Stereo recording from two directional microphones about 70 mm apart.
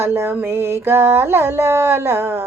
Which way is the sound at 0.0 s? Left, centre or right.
Right.